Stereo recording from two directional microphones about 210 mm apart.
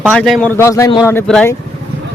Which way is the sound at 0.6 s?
15° left (ahead or behind).